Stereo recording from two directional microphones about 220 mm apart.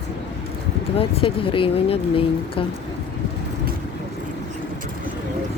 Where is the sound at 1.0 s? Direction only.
25° left (ahead or behind).